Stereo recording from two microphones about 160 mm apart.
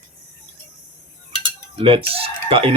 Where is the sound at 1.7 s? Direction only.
35° right (ahead or behind).